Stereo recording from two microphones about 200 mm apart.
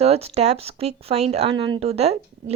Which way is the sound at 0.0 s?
30° right (ahead or behind).